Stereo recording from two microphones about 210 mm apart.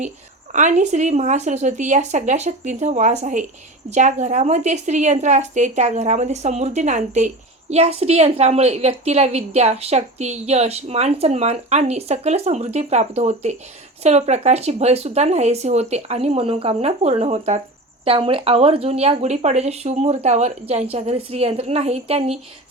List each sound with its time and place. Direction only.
0.5 s a woman's voice: 35° right (ahead or behind)